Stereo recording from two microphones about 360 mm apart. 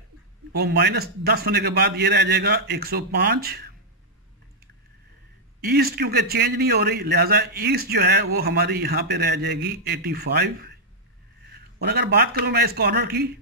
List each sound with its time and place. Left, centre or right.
0.5 s a man's voice: right
5.6 s a man's voice: right
11.8 s a man's voice: right